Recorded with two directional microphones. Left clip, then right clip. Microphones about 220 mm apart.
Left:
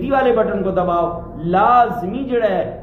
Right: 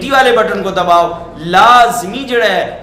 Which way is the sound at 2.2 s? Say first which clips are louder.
Right 6 dB; 5° right (ahead or behind).